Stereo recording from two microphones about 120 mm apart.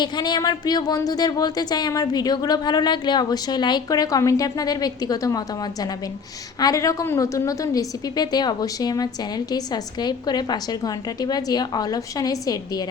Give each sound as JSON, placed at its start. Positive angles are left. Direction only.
{"t": 0.0, "sound": "speech", "side_deg": 35}
{"t": 6.6, "sound": "speech", "side_deg": 30}